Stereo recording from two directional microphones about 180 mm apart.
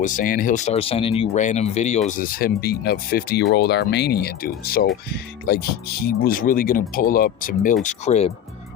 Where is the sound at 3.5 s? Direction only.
65° left (ahead or behind).